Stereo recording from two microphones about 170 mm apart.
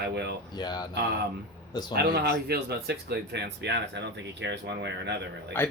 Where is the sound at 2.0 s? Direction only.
70° right (ahead or behind); by 5.2 s 90° right.